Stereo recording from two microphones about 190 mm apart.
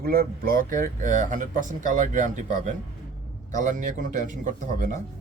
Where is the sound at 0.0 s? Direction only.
50° right (ahead or behind).